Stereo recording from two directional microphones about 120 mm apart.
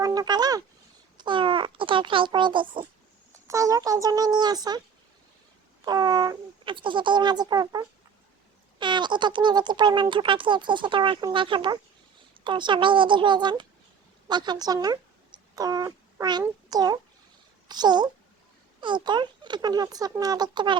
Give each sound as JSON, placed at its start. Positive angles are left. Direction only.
{"t": 0.0, "sound": "a sound", "side_deg": -30}
{"t": 1.1, "sound": "a child's voice", "side_deg": -40}
{"t": 3.3, "sound": "speech", "side_deg": -25}
{"t": 5.8, "sound": "a child's voice", "side_deg": -35}